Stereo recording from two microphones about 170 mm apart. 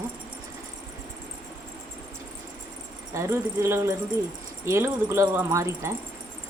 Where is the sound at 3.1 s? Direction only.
15° right (ahead or behind).